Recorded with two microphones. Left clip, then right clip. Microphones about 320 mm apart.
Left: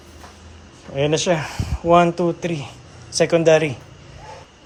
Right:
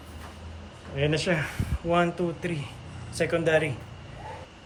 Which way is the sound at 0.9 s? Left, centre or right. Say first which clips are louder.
Left 7 dB; centre.